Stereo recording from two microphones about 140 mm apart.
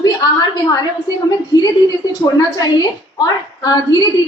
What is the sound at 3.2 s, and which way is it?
Speech, 30° left (ahead or behind).